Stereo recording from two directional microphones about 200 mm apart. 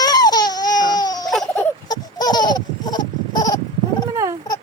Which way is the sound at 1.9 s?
20° left (ahead or behind).